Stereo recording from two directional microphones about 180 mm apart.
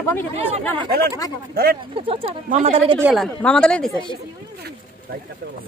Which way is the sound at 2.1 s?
30° right (ahead or behind).